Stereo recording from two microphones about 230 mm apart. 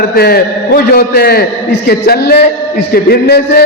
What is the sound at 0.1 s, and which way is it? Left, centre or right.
A man's voice, left.